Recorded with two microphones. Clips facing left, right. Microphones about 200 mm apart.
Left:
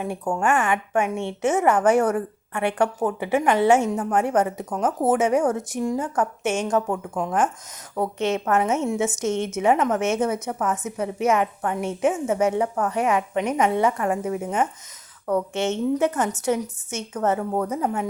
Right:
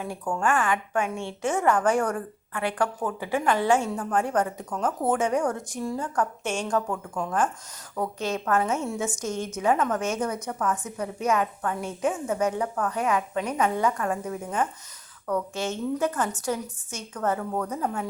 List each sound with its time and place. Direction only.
0.3 s speech: 25° left (ahead or behind)